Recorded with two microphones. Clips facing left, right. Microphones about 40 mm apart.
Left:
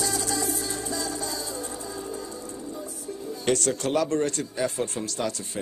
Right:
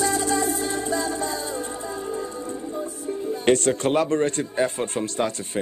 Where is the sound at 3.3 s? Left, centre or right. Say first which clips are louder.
Right 5 dB; right.